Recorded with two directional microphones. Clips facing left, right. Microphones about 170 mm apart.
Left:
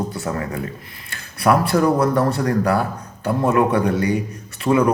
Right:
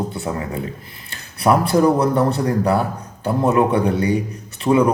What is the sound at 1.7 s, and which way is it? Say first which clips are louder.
Speech: right 1 dB; 25° right (ahead or behind).